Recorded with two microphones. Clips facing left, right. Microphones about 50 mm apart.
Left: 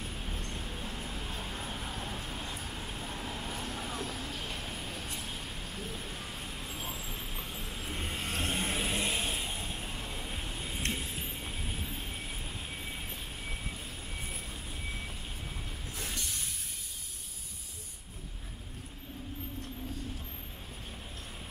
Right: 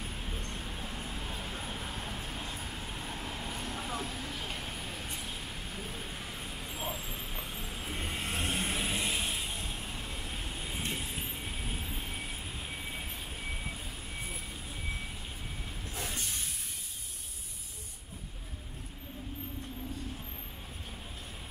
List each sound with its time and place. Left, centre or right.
0.0 s vehicle: centre